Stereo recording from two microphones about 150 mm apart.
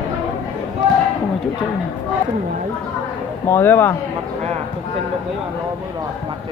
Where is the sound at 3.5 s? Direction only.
15° left (ahead or behind).